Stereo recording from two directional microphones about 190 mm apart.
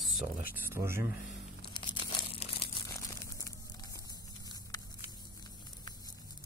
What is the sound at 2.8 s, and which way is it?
Crumpling, 15° left (ahead or behind).